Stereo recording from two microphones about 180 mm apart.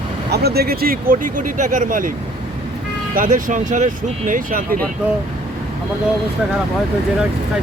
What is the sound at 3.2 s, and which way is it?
Speech, 45° right (ahead or behind).